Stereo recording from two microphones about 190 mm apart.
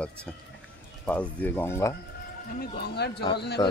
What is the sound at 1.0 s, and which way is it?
Speech, 10° left (ahead or behind).